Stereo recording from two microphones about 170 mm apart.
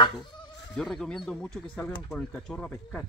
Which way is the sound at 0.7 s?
5° left (ahead or behind).